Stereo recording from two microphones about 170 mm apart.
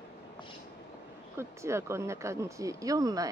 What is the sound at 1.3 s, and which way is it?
Speech, 15° right (ahead or behind).